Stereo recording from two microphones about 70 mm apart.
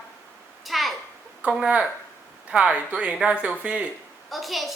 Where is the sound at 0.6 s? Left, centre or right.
Centre.